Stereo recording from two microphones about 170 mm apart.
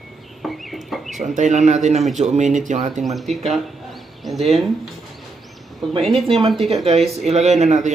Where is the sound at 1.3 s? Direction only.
45° right (ahead or behind).